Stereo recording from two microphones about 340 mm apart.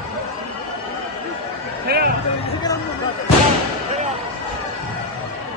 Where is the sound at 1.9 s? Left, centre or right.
Right.